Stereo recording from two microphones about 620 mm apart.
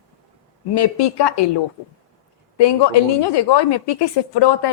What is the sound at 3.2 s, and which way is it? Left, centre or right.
Speech, left.